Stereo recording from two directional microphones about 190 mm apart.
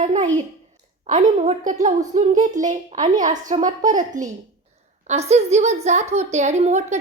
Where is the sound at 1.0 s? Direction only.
40° right (ahead or behind).